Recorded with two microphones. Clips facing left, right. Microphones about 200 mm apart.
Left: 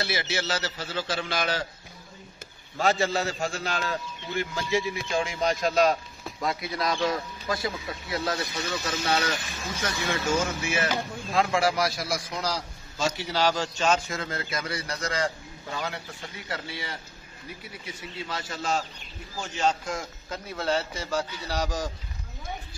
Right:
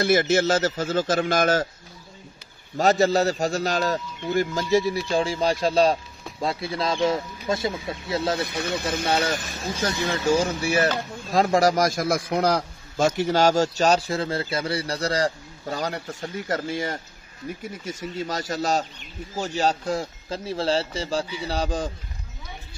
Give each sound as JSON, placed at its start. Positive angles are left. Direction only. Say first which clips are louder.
{"t": 0.0, "sound": "a man's voice", "louder": "right 11 dB", "side_deg": -50}
{"t": 2.8, "sound": "a man's voice", "louder": "right 6 dB", "side_deg": -40}
{"t": 8.4, "sound": "a man's voice", "louder": "right 4 dB", "side_deg": -60}